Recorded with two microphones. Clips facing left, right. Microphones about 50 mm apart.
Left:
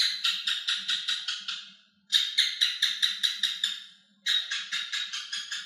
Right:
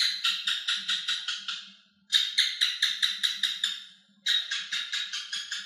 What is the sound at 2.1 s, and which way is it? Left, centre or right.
Music, centre.